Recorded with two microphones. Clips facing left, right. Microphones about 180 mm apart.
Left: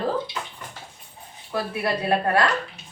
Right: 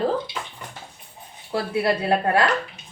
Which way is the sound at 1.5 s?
30° right (ahead or behind).